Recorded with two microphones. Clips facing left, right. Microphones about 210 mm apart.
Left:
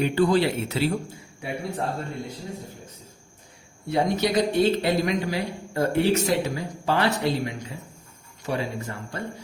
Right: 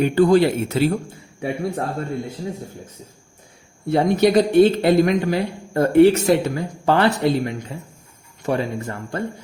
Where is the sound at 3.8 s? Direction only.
55° right (ahead or behind).